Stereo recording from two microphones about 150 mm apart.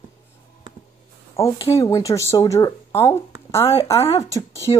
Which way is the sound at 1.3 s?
20° left (ahead or behind).